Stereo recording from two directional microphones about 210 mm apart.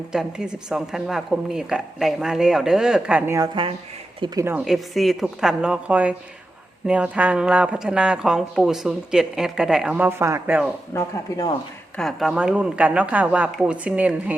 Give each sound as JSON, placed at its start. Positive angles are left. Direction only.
{"t": 0.1, "sound": "speech", "side_deg": -5}
{"t": 10.9, "sound": "speech", "side_deg": 15}
{"t": 11.9, "sound": "speech", "side_deg": 0}